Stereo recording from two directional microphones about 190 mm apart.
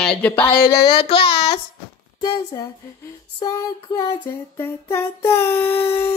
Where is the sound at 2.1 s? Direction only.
20° left (ahead or behind).